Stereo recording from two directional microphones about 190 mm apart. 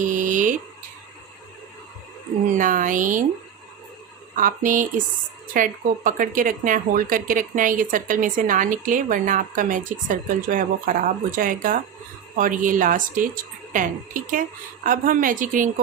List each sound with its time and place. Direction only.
0.0 s a sound: 45° right (ahead or behind)
2.6 s speech: 45° right (ahead or behind)
4.4 s speech: 45° right (ahead or behind)